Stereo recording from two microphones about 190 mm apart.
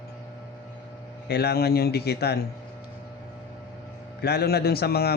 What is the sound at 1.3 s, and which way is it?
Speech, 55° left (ahead or behind).